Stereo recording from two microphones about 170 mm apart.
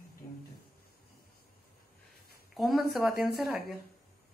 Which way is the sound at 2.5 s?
Centre (ahead or behind).